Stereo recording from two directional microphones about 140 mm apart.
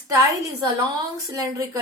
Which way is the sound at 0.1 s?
25° right (ahead or behind).